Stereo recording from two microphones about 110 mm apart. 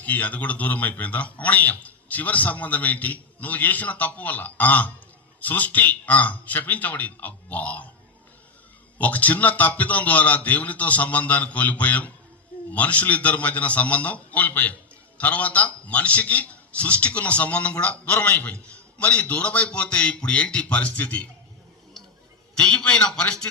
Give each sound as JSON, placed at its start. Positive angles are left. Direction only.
{"t": 0.0, "sound": "a man's voice", "side_deg": 15}
{"t": 9.0, "sound": "a man's voice", "side_deg": 15}
{"t": 22.5, "sound": "a man's voice", "side_deg": 10}